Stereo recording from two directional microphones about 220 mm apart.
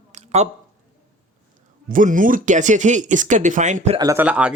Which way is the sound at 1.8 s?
35° right (ahead or behind).